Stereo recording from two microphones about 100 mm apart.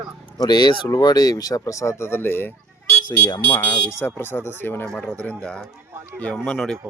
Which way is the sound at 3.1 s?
45° left (ahead or behind).